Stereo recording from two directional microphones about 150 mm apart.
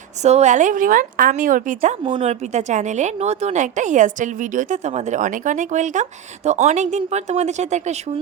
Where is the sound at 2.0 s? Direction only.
35° right (ahead or behind).